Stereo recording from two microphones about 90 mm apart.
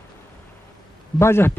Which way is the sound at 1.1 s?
30° left (ahead or behind).